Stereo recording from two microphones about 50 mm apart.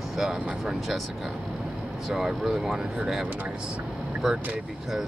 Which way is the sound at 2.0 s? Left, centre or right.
Centre.